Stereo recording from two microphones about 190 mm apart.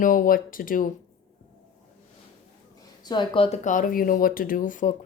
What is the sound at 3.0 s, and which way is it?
Speech, 25° left (ahead or behind).